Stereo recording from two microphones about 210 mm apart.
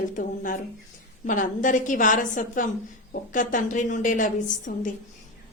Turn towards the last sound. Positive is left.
turn(degrees=40)  # may be behind; listen again after turning